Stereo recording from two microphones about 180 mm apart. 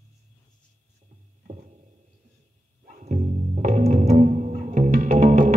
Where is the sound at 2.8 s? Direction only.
45° right (ahead or behind).